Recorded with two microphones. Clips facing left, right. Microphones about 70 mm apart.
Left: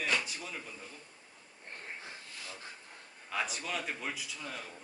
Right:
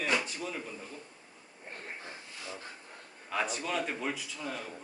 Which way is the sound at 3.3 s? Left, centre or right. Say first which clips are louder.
Right 4 dB; centre.